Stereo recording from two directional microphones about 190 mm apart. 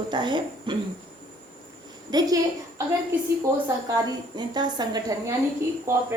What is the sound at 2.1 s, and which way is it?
Speech, 20° right (ahead or behind).